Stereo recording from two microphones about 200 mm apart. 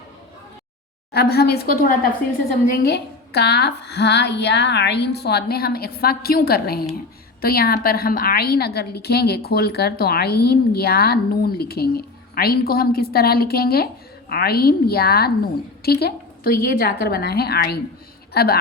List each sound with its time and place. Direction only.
1.1 s a woman's voice: 50° left (ahead or behind)